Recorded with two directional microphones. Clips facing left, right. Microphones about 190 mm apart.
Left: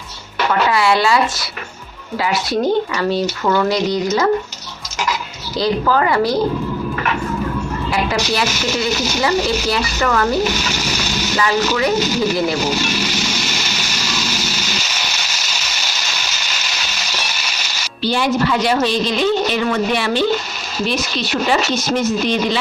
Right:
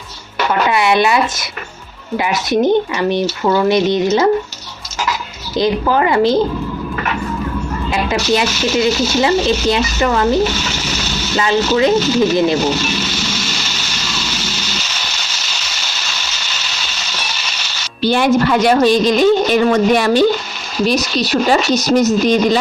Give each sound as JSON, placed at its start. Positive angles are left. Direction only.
{"t": 0.7, "sound": "speech", "side_deg": -20}
{"t": 5.5, "sound": "speech", "side_deg": -20}
{"t": 8.3, "sound": "speech", "side_deg": -20}
{"t": 11.3, "sound": "speech", "side_deg": -25}
{"t": 18.0, "sound": "a woman's voice", "side_deg": -55}